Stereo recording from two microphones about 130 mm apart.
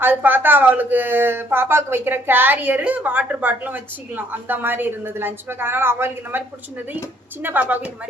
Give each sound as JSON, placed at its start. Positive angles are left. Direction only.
{"t": 0.0, "sound": "speech", "side_deg": -15}
{"t": 7.4, "sound": "speech", "side_deg": -15}